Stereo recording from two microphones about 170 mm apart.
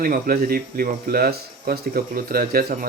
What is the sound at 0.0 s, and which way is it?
Speech, 60° right (ahead or behind).